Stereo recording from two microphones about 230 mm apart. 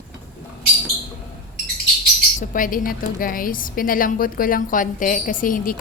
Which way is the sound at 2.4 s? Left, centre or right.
Left.